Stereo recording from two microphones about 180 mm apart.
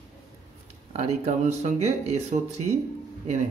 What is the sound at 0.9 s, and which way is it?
A man's voice, 40° right (ahead or behind).